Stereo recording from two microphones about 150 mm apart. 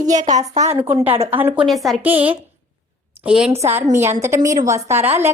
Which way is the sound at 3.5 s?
15° right (ahead or behind).